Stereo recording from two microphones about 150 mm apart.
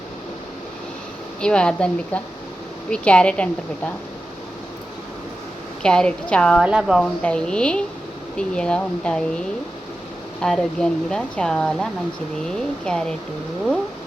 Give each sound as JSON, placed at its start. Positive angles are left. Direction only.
{"t": 1.4, "sound": "speech", "side_deg": 5}
{"t": 5.8, "sound": "speech", "side_deg": 5}
{"t": 6.7, "sound": "speech", "side_deg": -5}
{"t": 7.2, "sound": "speech", "side_deg": 5}
{"t": 10.4, "sound": "speech", "side_deg": 5}